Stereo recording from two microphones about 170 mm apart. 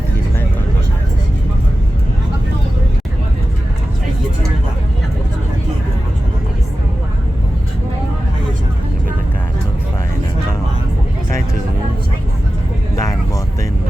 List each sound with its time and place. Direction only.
13.0 s vehicle: 20° left (ahead or behind)